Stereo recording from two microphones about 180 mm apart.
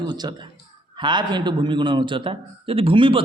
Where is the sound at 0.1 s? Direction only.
25° right (ahead or behind).